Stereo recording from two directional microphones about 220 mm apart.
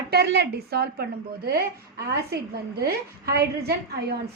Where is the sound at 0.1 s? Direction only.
45° right (ahead or behind).